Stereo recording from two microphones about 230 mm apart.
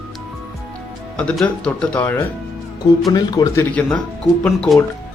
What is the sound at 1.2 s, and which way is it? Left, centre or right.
Speech, centre.